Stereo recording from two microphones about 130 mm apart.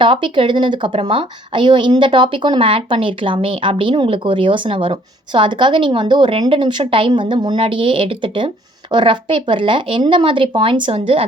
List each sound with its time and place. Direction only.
0.0 s a woman's voice: 40° right (ahead or behind)